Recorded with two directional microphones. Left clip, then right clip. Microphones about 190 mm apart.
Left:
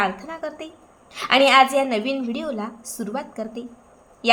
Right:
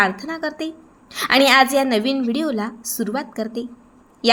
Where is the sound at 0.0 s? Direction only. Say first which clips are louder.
Right 5 dB; 25° right (ahead or behind).